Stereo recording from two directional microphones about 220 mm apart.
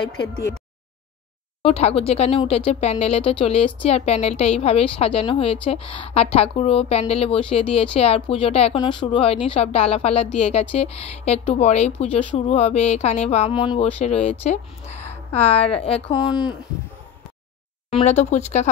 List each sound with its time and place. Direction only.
1.6 s a woman's voice: 25° left (ahead or behind)
17.9 s speech: 30° left (ahead or behind)